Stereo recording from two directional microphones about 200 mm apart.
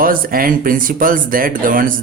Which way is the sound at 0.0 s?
45° right (ahead or behind).